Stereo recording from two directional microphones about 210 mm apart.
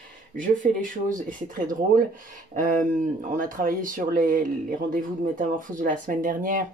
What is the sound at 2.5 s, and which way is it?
Speech, 40° right (ahead or behind).